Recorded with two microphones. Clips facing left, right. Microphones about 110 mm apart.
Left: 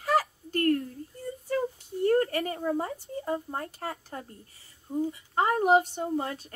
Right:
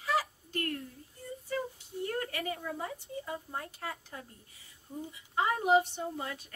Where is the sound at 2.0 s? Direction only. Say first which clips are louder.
Left 11 dB; 45° left (ahead or behind).